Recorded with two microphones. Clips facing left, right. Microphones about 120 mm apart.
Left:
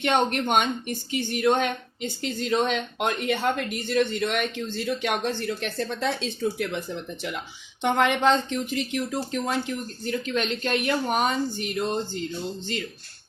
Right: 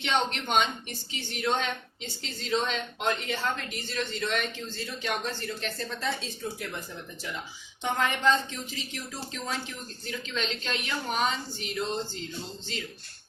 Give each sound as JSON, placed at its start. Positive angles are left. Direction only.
{"t": 0.0, "sound": "speech", "side_deg": 50}